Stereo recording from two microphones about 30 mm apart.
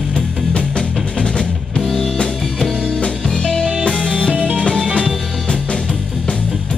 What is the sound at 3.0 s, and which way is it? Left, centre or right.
Music, left.